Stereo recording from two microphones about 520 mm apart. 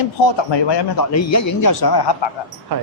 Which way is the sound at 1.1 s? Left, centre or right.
Left.